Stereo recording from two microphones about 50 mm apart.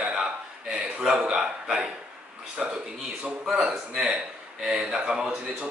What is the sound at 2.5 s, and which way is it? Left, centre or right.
A man's voice, centre.